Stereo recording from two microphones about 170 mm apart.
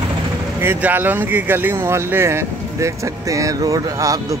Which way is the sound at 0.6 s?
10° right (ahead or behind).